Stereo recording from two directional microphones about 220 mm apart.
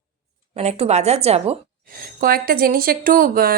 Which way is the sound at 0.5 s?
30° right (ahead or behind).